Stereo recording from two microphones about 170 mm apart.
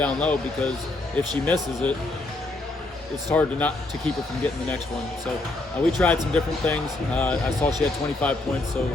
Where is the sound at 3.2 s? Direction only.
10° left (ahead or behind).